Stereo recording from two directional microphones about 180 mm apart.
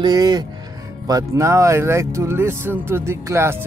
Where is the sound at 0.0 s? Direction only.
25° right (ahead or behind).